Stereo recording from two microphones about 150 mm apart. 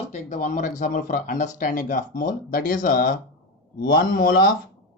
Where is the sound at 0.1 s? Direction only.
50° left (ahead or behind); by 4.5 s 70° left (ahead or behind).